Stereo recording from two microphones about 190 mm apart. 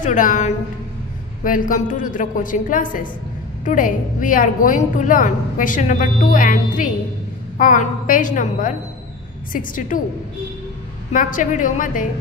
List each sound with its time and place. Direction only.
0.0 s a woman's voice: 40° left (ahead or behind)
11.1 s a woman's voice: 45° left (ahead or behind)